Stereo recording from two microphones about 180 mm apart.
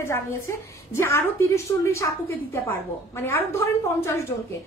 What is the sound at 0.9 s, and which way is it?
A woman's voice, 15° left (ahead or behind).